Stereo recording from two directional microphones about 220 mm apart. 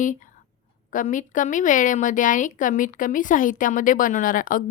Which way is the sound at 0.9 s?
35° left (ahead or behind).